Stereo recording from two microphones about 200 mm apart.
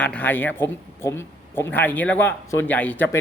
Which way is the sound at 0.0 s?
10° left (ahead or behind).